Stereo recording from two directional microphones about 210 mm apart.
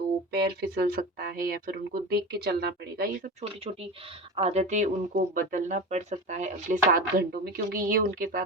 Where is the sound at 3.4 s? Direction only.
30° right (ahead or behind).